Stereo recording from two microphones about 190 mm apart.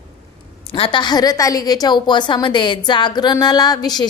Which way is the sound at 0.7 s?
25° left (ahead or behind).